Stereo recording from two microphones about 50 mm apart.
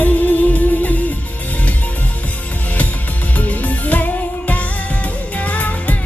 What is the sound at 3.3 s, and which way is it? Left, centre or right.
Music, left.